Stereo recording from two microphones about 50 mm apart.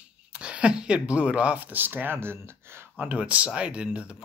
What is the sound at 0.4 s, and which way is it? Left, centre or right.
Speech, right.